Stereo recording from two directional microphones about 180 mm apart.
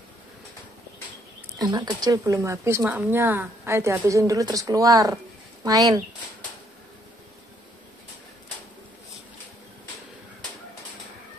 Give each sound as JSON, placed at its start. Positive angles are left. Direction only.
{"t": 1.6, "sound": "speech", "side_deg": -25}